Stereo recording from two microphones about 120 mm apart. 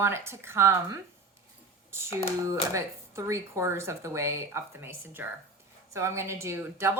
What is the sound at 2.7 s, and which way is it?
A woman's voice, 25° right (ahead or behind).